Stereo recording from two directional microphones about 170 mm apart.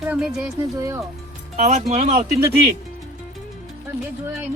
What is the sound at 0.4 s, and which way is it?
Speech, 20° right (ahead or behind).